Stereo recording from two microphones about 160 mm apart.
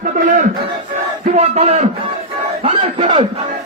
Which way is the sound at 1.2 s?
45° right (ahead or behind).